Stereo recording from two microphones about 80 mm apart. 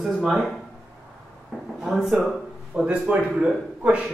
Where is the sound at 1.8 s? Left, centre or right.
Centre.